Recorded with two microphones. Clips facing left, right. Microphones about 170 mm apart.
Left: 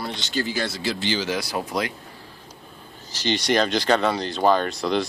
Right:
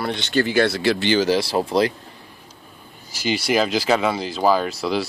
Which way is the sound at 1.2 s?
30° right (ahead or behind).